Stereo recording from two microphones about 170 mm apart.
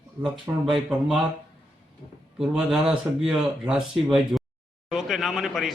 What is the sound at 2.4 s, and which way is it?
Speech, 5° right (ahead or behind).